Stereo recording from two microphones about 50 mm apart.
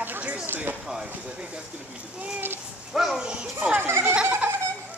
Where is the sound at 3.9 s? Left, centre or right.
Right.